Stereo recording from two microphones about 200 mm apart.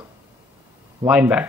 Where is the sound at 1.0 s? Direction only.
5° right (ahead or behind).